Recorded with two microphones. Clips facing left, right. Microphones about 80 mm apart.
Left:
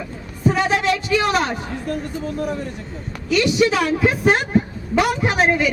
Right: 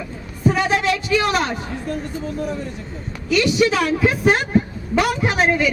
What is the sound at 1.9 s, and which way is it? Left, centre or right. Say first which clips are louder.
Speech: left 1 dB; left.